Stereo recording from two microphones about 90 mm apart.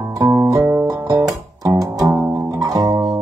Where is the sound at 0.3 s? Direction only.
30° right (ahead or behind).